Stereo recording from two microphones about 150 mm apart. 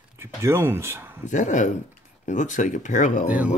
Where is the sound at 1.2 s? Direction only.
55° left (ahead or behind).